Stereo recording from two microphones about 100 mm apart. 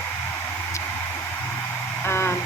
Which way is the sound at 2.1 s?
25° left (ahead or behind).